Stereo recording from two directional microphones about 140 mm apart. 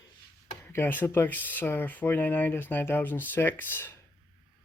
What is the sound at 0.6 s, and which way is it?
Speech, 15° left (ahead or behind).